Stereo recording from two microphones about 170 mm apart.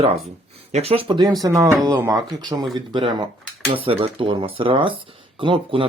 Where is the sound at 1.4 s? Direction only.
15° right (ahead or behind).